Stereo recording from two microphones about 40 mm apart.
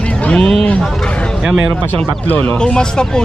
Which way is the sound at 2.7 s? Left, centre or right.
Left.